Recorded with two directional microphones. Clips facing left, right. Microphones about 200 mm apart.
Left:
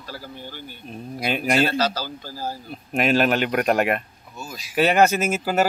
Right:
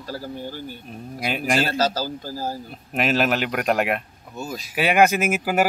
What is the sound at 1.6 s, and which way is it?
Speech, 45° right (ahead or behind).